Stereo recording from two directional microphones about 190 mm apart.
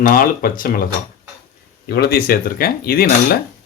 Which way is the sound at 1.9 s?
55° left (ahead or behind).